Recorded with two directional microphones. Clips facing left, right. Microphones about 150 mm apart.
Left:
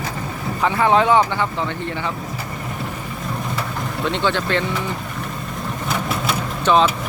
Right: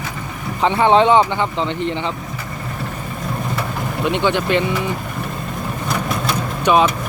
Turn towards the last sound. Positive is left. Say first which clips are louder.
# right 1 dB
turn(degrees=-15)  # may be behind; listen again after turning